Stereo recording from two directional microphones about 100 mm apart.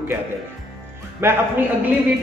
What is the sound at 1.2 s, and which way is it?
Speech, 25° right (ahead or behind).